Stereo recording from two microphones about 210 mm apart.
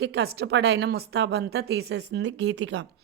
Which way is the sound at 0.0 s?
50° right (ahead or behind).